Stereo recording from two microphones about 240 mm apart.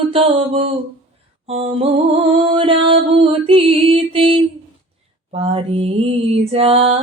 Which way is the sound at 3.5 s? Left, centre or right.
Right.